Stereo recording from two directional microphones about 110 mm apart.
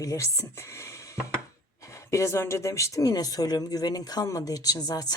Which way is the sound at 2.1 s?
25° left (ahead or behind).